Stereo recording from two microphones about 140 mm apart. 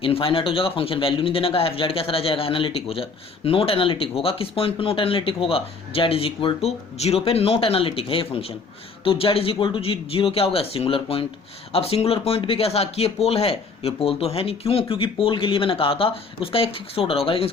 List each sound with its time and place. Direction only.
0.0 s a man's voice: 40° left (ahead or behind)